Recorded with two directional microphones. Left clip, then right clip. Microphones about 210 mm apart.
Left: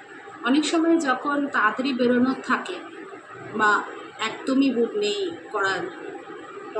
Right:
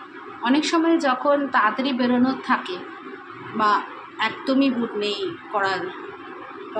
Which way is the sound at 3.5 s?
10° right (ahead or behind).